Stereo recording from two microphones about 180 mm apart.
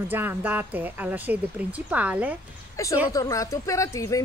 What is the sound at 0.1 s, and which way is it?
Speech, 10° right (ahead or behind).